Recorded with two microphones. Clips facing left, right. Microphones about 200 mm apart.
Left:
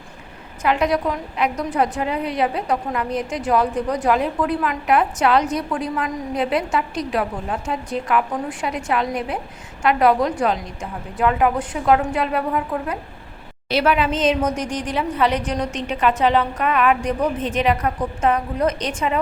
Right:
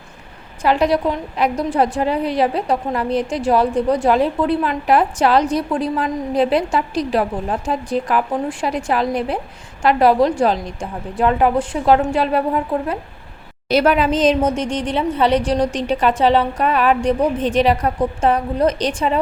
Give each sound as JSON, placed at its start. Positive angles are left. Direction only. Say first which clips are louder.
{"t": 0.6, "sound": "a woman's voice", "louder": "right 3 dB", "side_deg": -30}
{"t": 13.7, "sound": "a woman's voice", "louder": "right 4 dB", "side_deg": -40}
{"t": 14.5, "sound": "a woman's voice", "louder": "right 3 dB", "side_deg": -25}